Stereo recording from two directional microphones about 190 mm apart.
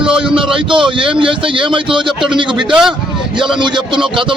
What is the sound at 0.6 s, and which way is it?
A man's voice, 25° right (ahead or behind).